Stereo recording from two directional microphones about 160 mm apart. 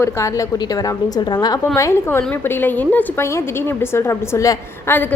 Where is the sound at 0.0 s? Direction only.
20° left (ahead or behind).